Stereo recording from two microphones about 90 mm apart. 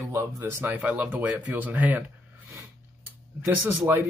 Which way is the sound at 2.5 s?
25° right (ahead or behind).